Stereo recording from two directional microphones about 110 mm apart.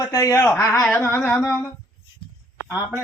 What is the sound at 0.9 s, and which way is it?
Humming, 20° left (ahead or behind).